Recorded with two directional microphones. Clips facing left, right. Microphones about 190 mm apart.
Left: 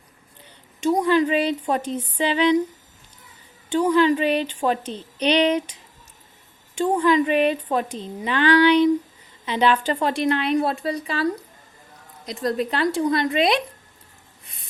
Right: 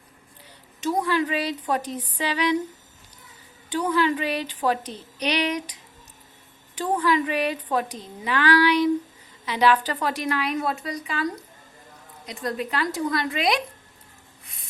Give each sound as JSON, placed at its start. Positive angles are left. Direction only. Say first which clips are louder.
{"t": 0.9, "sound": "a woman's voice", "louder": "left 5 dB", "side_deg": 20}
{"t": 3.7, "sound": "a woman's voice", "louder": "left 5 dB", "side_deg": 25}
{"t": 6.7, "sound": "a woman's voice", "louder": "left 4 dB", "side_deg": 25}